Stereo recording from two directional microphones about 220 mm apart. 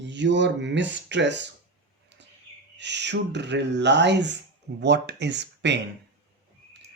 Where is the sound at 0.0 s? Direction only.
55° right (ahead or behind).